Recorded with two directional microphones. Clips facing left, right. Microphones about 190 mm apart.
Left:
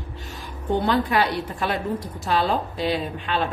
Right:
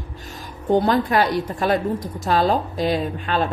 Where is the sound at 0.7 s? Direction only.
40° right (ahead or behind).